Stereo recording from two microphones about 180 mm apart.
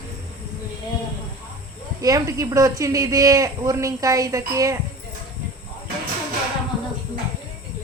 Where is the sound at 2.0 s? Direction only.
20° right (ahead or behind).